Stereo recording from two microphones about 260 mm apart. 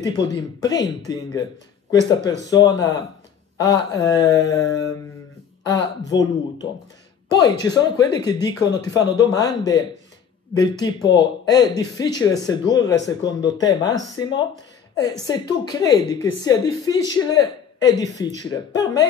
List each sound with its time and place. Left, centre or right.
0.0 s speech: centre